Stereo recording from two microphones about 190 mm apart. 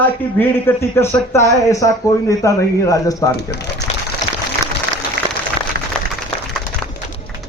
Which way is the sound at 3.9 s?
35° left (ahead or behind).